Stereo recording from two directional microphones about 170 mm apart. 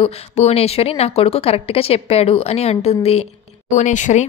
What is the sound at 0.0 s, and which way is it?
Speech, 35° left (ahead or behind).